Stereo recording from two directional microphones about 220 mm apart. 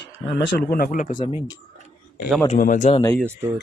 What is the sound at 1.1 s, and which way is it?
Speech, 25° left (ahead or behind).